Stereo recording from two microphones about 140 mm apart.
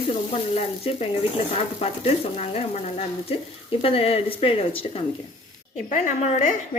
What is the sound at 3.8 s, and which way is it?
Speech, 45° left (ahead or behind).